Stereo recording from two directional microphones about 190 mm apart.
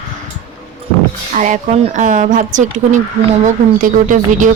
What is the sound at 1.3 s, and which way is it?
A woman's voice, 40° right (ahead or behind).